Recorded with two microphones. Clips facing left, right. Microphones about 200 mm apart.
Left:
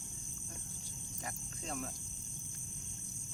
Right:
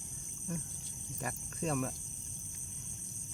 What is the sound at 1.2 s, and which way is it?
Speech, 65° right (ahead or behind).